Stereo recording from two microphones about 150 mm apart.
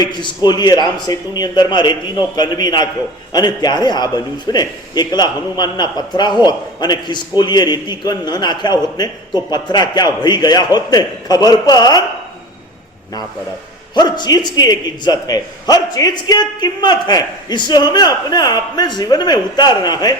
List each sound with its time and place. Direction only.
0.0 s a man's voice: 30° left (ahead or behind)
13.9 s a man's voice: 30° left (ahead or behind)